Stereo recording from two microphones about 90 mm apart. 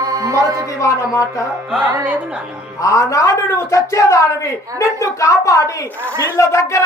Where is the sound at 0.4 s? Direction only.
40° right (ahead or behind).